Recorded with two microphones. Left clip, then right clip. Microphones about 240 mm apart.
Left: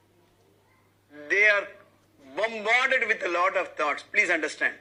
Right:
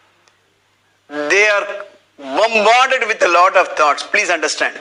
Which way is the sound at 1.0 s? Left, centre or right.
Right.